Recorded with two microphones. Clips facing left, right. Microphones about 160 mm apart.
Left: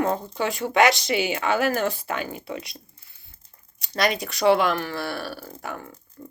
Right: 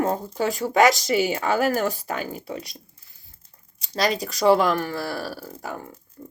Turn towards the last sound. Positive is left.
turn(degrees=-35)  # may be behind; listen again after turning